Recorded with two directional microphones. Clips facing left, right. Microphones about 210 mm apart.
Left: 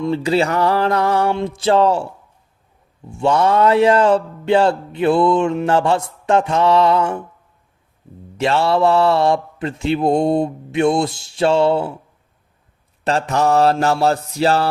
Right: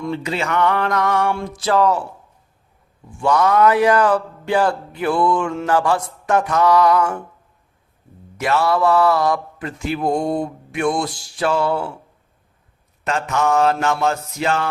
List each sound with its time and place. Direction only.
0.0 s mantra: 30° left (ahead or behind)
3.1 s speech: 25° left (ahead or behind)
8.4 s speech: 30° left (ahead or behind)
13.1 s mantra: 35° left (ahead or behind)